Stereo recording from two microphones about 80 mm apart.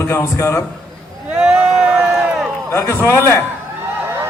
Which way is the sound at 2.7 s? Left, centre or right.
Left.